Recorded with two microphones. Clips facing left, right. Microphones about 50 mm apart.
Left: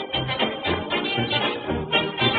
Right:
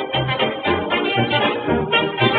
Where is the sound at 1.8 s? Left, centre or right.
Right.